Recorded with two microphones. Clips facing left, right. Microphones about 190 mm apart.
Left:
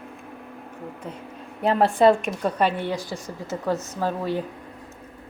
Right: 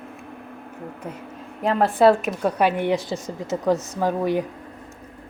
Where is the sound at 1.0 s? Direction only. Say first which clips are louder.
Right 2 dB; 10° right (ahead or behind).